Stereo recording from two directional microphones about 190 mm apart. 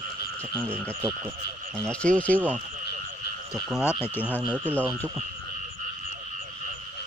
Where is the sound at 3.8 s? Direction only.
10° left (ahead or behind).